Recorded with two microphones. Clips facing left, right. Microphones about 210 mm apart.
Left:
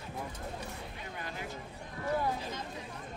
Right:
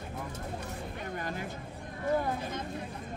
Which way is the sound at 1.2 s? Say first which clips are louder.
Right 3 dB; 50° right (ahead or behind).